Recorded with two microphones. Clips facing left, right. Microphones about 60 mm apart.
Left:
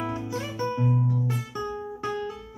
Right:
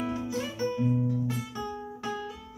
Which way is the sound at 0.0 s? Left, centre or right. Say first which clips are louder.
Left 1 dB; left.